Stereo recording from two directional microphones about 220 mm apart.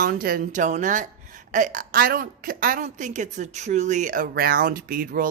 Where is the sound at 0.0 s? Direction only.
40° right (ahead or behind).